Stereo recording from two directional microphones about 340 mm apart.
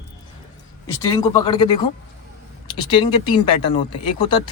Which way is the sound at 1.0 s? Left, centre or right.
Centre.